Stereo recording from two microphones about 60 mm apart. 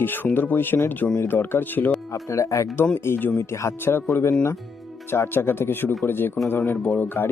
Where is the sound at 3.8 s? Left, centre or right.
Left.